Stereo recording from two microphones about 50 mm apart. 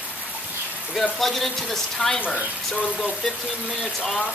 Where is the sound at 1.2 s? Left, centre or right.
Centre.